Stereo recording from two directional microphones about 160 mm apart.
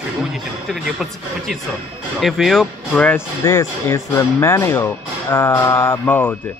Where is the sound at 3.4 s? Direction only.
20° left (ahead or behind).